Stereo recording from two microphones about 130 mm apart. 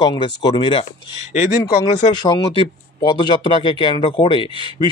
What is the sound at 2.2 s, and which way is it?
A man's voice, 30° left (ahead or behind).